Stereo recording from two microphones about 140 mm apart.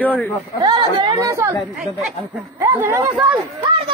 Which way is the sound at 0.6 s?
30° right (ahead or behind).